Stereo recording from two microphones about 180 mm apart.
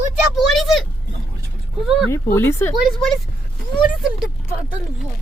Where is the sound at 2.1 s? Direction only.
15° left (ahead or behind).